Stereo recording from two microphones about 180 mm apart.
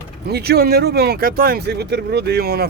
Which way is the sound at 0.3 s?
65° right (ahead or behind).